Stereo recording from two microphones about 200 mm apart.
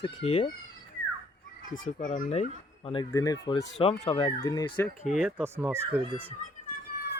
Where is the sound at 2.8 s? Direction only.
25° left (ahead or behind).